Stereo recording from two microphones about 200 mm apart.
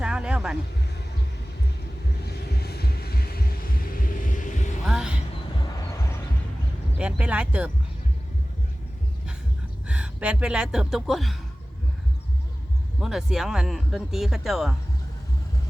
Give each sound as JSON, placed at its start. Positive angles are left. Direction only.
{"t": 0.0, "sound": "vehicle", "side_deg": -5}
{"t": 2.2, "sound": "a sound", "side_deg": 55}
{"t": 4.9, "sound": "music", "side_deg": -5}
{"t": 5.9, "sound": "music", "side_deg": 15}
{"t": 7.0, "sound": "a sound", "side_deg": -5}
{"t": 9.8, "sound": "speech", "side_deg": -5}
{"t": 13.0, "sound": "speech", "side_deg": 0}